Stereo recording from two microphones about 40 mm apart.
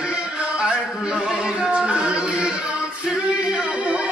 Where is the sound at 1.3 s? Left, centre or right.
Right.